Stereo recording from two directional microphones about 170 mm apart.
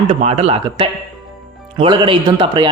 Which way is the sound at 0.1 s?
40° right (ahead or behind).